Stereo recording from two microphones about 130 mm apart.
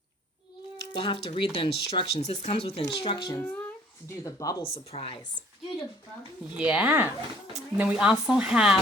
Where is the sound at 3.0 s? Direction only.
40° left (ahead or behind).